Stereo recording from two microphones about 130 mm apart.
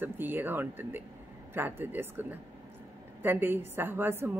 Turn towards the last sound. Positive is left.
turn(degrees=-15)  # may be behind; listen again after turning